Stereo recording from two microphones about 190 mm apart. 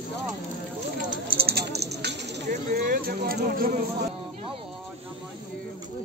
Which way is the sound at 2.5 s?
50° right (ahead or behind).